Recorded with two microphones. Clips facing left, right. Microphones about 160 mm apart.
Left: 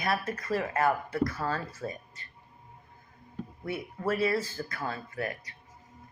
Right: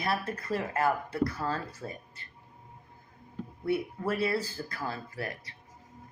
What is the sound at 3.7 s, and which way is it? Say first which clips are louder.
Speech: left 1 dB; 30° right (ahead or behind).